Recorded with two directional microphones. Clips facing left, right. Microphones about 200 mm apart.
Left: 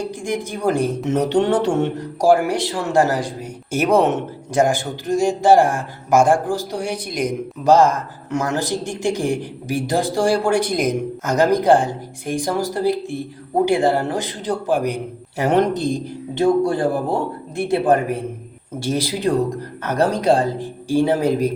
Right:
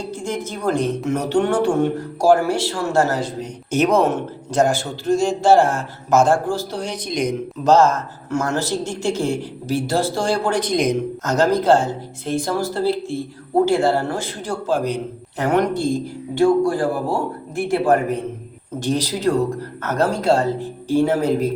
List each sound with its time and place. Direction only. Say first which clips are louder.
0.0 s a woman's voice: left 2 dB; 15° left (ahead or behind)
19.8 s a woman's voice: left 2 dB; 15° left (ahead or behind)